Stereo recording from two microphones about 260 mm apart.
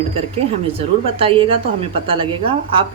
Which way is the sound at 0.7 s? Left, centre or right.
Right.